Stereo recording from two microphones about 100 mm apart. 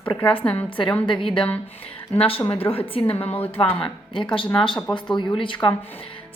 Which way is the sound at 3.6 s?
65° left (ahead or behind).